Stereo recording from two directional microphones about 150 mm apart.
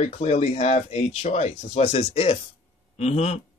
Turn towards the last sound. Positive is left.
turn(degrees=45)  # may be behind; listen again after turning